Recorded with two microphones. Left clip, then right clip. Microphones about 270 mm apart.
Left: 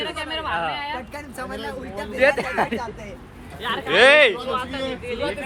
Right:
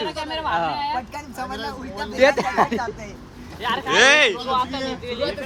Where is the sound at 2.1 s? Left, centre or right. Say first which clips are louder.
Right 2 dB; right.